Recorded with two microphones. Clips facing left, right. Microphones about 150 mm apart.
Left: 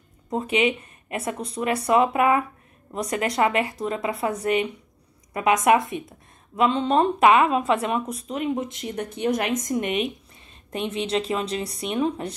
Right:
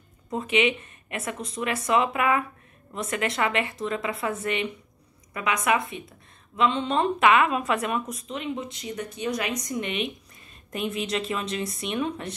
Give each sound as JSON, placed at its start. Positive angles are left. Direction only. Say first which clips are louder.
{"t": 0.3, "sound": "a woman's voice", "louder": "left 2 dB", "side_deg": 35}
{"t": 10.7, "sound": "a woman's voice", "louder": "left 3 dB", "side_deg": 30}